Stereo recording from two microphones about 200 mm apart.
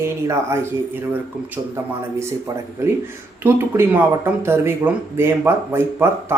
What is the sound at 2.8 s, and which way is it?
Speech, 15° right (ahead or behind).